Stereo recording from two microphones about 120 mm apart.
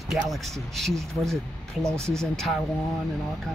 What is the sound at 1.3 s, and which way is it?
Speech, 25° right (ahead or behind).